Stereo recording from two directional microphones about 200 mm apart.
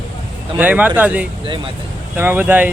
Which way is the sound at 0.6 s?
10° right (ahead or behind).